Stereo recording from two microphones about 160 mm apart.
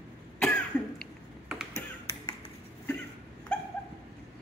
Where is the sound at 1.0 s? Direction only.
Centre (ahead or behind).